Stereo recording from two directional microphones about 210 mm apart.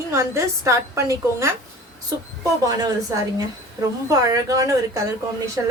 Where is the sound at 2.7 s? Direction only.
20° right (ahead or behind).